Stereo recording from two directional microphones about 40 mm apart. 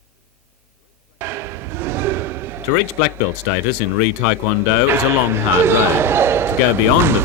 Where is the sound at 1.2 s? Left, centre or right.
Right.